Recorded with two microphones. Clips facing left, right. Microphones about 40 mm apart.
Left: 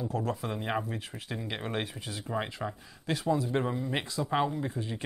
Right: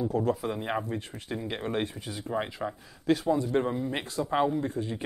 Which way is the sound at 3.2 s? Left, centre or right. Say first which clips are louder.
Right 2 dB; centre.